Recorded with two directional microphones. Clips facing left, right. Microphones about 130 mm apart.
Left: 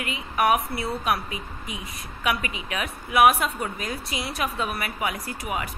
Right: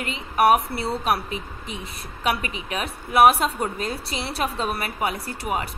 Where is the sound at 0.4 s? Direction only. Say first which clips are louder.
Right 4 dB; 30° right (ahead or behind).